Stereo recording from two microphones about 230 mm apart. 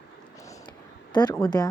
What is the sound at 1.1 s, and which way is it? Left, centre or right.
Speech, centre.